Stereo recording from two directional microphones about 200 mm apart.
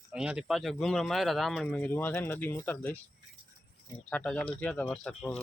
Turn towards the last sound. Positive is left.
turn(degrees=5)  # may be behind; listen again after turning